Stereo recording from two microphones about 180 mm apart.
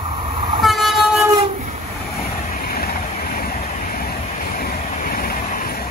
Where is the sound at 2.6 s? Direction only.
55° left (ahead or behind).